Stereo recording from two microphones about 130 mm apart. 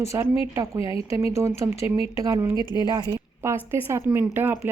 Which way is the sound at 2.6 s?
35° left (ahead or behind).